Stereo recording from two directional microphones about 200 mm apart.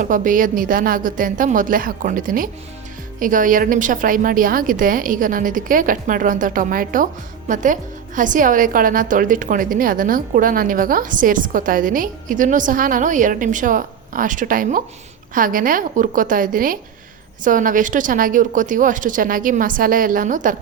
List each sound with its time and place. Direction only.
0.0 s a woman's voice: 40° right (ahead or behind)